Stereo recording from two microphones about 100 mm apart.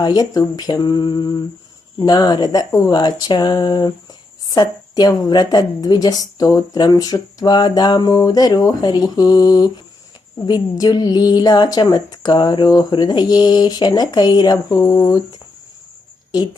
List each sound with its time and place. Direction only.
0.0 s a woman's voice: 40° left (ahead or behind)